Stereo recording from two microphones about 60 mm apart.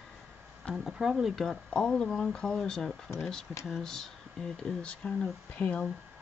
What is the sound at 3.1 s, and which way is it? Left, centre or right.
Speech, left.